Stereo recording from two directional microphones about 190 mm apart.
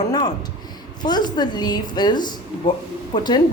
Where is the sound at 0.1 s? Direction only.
20° left (ahead or behind).